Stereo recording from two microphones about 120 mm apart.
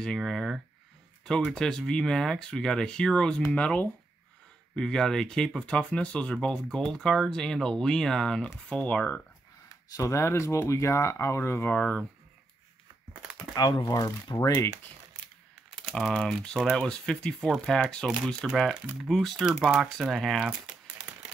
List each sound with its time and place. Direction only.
0.0 s speech: 5° left (ahead or behind)
9.9 s speech: 25° left (ahead or behind)
13.1 s crumpling: 5° right (ahead or behind)
13.6 s speech: 35° left (ahead or behind)
15.8 s speech: centre (ahead or behind)